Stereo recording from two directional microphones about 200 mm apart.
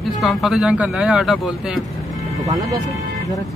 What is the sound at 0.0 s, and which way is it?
Speech, centre (ahead or behind).